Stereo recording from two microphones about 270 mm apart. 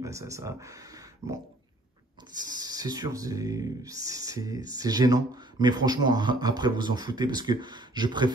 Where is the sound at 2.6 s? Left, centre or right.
Centre.